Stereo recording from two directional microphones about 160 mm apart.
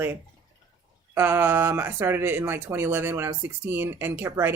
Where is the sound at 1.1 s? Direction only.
15° right (ahead or behind).